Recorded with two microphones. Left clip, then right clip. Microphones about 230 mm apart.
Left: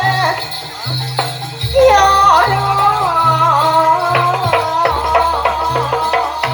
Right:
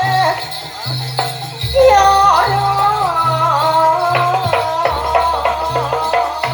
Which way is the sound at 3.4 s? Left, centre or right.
Left.